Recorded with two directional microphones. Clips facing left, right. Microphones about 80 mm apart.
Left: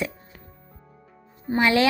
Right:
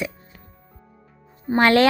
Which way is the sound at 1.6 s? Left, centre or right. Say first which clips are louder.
Right 4 dB; right.